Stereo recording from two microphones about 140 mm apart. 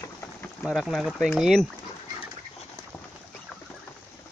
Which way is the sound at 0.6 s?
Centre (ahead or behind).